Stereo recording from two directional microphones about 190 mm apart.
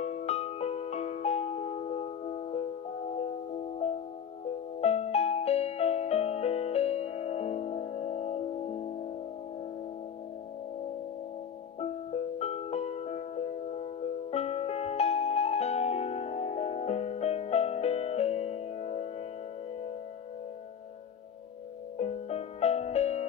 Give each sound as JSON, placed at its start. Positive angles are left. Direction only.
{"t": 0.0, "sound": "music", "side_deg": 35}
{"t": 4.7, "sound": "music", "side_deg": 30}
{"t": 11.8, "sound": "music", "side_deg": 35}
{"t": 21.9, "sound": "music", "side_deg": 35}